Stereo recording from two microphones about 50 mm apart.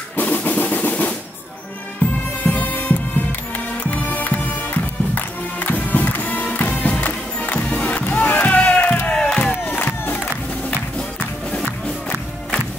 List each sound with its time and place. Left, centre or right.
0.1 s drum: left
2.4 s music: left
8.1 s a sound: left
9.4 s crowd: left